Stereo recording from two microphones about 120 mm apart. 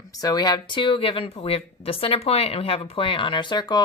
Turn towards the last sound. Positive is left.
turn(degrees=35)  # may be behind; listen again after turning